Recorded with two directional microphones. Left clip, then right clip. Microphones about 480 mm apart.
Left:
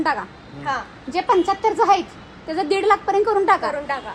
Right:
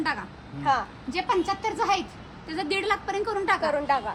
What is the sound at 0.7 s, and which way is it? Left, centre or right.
Speech, centre.